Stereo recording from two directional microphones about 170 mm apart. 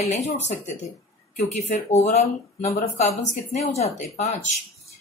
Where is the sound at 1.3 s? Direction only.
40° left (ahead or behind).